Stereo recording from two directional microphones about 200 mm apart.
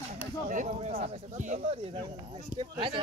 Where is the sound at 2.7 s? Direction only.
25° right (ahead or behind).